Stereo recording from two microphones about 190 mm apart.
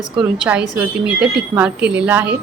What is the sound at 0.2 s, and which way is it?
A woman's voice, 5° right (ahead or behind).